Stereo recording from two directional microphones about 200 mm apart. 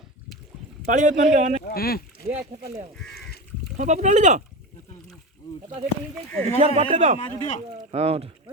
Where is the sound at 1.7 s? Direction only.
50° left (ahead or behind).